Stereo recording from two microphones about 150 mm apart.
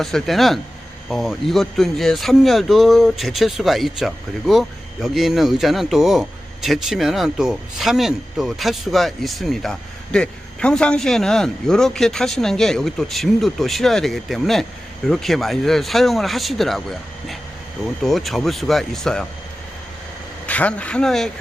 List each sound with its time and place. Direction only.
0.0 s speech: centre (ahead or behind)
20.5 s speech: 10° left (ahead or behind)